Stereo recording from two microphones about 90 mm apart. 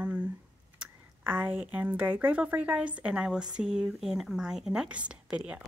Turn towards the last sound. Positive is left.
turn(degrees=-10)  # may be behind; listen again after turning